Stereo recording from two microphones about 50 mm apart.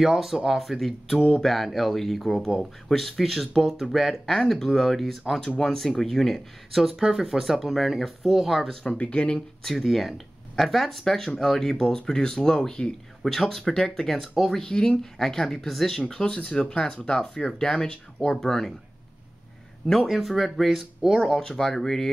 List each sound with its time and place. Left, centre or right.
0.0 s speech: centre
8.8 s speech: left
9.6 s speech: centre
13.2 s speech: centre
14.7 s speech: centre
19.9 s speech: centre